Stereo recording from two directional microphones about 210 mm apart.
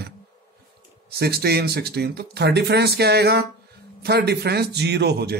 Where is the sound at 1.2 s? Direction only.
50° right (ahead or behind).